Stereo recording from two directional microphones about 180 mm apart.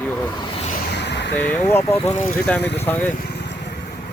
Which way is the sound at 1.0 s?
75° left (ahead or behind).